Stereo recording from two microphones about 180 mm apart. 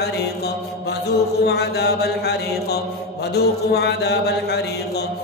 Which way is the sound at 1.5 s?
65° left (ahead or behind).